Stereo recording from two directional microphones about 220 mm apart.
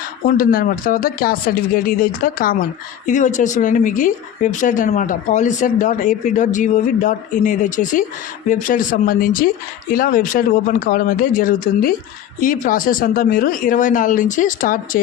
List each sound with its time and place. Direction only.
0.3 s a woman's voice: 40° left (ahead or behind)